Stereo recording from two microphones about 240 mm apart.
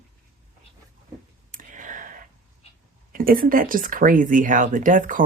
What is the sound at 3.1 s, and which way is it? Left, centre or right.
Speech, right.